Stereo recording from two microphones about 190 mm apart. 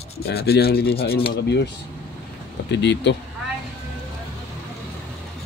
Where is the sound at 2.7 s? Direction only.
65° left (ahead or behind).